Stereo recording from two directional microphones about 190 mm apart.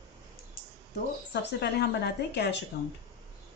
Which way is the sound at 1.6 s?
60° left (ahead or behind).